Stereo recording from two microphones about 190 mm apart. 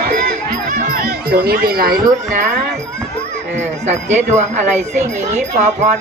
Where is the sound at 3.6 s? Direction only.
35° right (ahead or behind).